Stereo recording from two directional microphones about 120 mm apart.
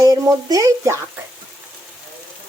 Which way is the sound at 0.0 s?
30° right (ahead or behind).